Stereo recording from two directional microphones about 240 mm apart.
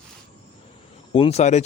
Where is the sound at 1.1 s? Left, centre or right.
Left.